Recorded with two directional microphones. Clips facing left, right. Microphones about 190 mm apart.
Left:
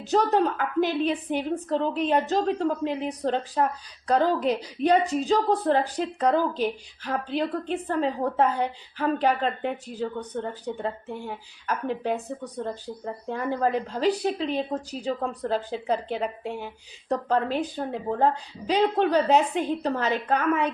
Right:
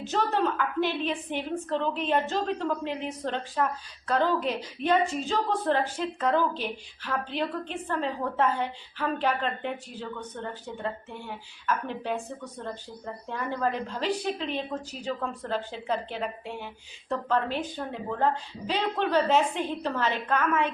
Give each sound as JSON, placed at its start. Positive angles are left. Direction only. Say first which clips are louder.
{"t": 0.0, "sound": "a woman's voice", "louder": "left 5 dB", "side_deg": 40}
{"t": 10.7, "sound": "a woman's voice", "louder": "left 4 dB", "side_deg": 30}
{"t": 13.2, "sound": "a woman's voice", "louder": "left 4 dB", "side_deg": 40}